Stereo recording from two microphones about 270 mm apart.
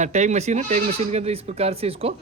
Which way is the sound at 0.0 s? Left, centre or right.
Right.